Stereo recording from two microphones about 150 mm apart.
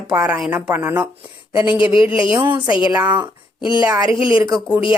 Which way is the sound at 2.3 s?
10° right (ahead or behind).